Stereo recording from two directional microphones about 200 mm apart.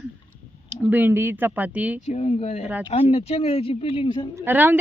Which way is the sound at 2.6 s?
10° right (ahead or behind).